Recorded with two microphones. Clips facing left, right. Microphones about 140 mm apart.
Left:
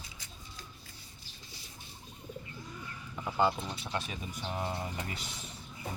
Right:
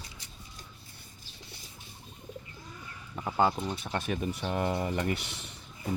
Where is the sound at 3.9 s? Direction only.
55° right (ahead or behind).